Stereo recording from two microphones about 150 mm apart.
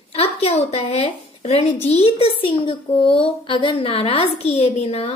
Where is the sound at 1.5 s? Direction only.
40° left (ahead or behind).